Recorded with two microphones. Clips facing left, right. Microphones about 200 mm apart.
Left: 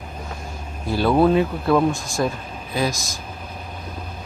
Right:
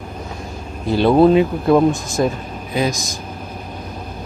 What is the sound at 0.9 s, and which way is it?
Speech, 20° right (ahead or behind).